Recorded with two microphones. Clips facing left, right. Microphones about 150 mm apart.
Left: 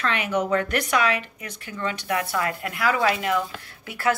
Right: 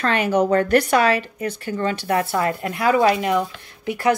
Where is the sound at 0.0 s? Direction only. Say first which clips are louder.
Right 6 dB; 35° right (ahead or behind).